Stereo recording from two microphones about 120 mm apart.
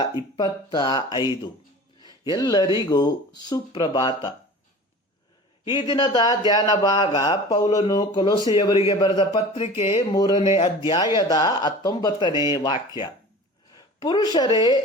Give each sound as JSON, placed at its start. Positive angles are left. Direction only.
{"t": 0.3, "sound": "speech", "side_deg": 35}
{"t": 5.7, "sound": "speech", "side_deg": 40}
{"t": 10.1, "sound": "speech", "side_deg": 35}